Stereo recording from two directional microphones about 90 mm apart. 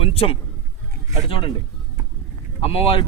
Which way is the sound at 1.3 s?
75° left (ahead or behind).